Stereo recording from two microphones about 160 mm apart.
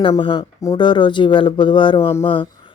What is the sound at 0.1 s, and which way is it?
Speech, 30° left (ahead or behind).